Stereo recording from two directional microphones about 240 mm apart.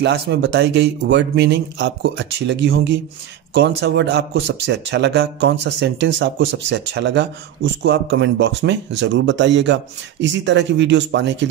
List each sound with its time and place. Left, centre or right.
0.0 s speech: right